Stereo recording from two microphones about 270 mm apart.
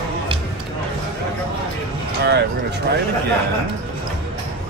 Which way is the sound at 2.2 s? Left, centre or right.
Right.